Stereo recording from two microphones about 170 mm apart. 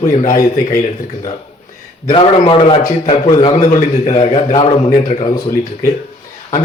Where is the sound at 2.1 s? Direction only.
30° left (ahead or behind).